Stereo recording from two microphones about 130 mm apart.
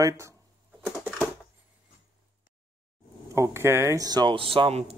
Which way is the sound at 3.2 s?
25° right (ahead or behind).